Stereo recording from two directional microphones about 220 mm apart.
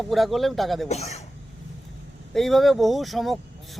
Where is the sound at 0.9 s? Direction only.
30° left (ahead or behind).